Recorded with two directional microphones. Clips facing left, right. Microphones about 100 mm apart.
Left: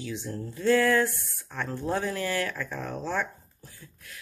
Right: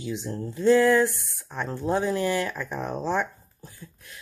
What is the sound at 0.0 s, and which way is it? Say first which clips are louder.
Speech: right 3 dB; 20° right (ahead or behind).